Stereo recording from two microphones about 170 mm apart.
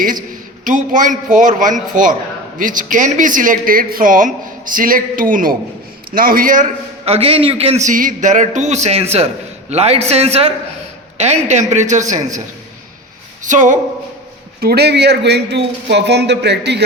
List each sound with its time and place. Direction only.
0.6 s a man's voice: 50° right (ahead or behind)
7.0 s a man's voice: 35° right (ahead or behind)
13.4 s speech: 45° right (ahead or behind)
14.6 s speech: 65° right (ahead or behind)